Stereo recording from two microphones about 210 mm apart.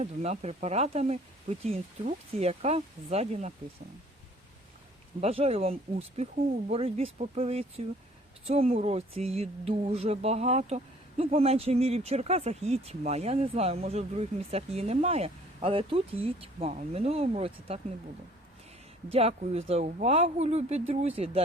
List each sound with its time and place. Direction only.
0.0 s speech: 30° right (ahead or behind)
5.2 s speech: 30° right (ahead or behind)
19.1 s speech: 30° right (ahead or behind)